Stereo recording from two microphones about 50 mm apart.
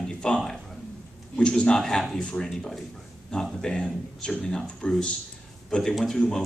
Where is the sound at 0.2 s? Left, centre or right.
Centre.